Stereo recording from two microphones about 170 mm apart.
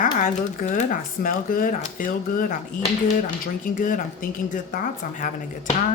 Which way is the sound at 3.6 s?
50° left (ahead or behind).